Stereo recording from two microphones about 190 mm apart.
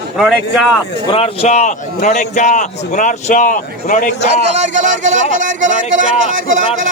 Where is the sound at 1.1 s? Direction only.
30° left (ahead or behind).